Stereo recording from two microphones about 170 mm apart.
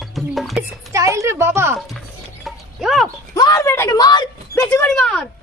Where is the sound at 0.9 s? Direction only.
20° right (ahead or behind).